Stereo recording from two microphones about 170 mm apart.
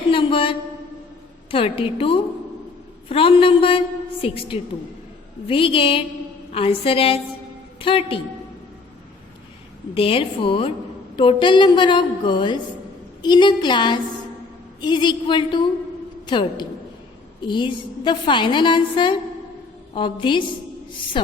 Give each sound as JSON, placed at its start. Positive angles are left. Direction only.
{"t": 0.1, "sound": "a sound", "side_deg": 30}
{"t": 1.5, "sound": "a woman's voice", "side_deg": 30}
{"t": 9.9, "sound": "a woman's voice", "side_deg": 35}